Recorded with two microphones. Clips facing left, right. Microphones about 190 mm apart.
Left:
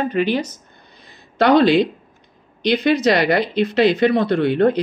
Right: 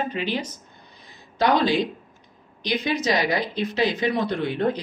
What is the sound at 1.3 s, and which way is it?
Speech, 65° left (ahead or behind).